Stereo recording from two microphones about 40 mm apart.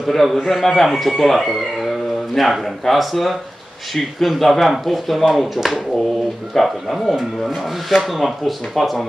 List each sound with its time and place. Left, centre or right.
0.0 s speech: centre